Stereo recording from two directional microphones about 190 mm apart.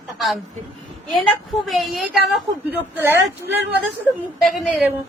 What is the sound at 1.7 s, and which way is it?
A woman's voice, centre (ahead or behind).